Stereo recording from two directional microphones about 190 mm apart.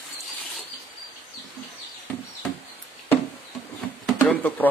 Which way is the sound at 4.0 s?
5° left (ahead or behind).